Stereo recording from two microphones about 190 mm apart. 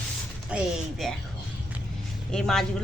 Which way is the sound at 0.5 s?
5° right (ahead or behind).